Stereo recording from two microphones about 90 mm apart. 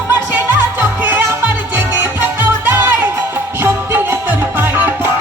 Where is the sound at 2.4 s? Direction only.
20° right (ahead or behind).